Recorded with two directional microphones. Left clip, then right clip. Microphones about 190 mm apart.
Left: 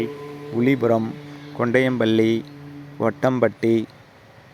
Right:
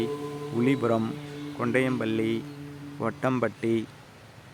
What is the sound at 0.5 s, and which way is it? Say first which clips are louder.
Speech: left 6 dB; 20° left (ahead or behind).